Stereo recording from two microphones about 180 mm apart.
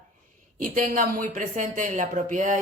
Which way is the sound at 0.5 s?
45° right (ahead or behind).